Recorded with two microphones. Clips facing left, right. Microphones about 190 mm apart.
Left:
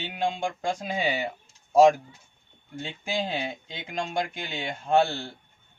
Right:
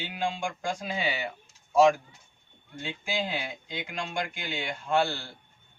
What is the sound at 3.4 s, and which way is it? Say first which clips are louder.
Speech: left 2 dB; 25° left (ahead or behind).